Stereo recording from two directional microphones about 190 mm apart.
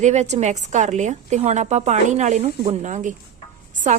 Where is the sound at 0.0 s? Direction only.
35° right (ahead or behind).